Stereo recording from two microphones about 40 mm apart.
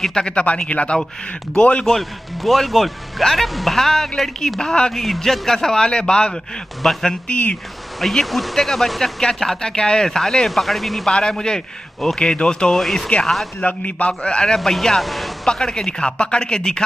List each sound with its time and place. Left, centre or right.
0.0 s a man's voice: left
1.9 s speech: centre
4.6 s speech: centre
4.9 s speech: centre; by 6.4 s left
6.8 s speech: centre
7.2 s a man's voice: left
8.0 s speech: centre
11.1 s speech: centre
12.7 s speech: centre
13.6 s a man's voice: left
14.4 s speech: centre
15.4 s speech: centre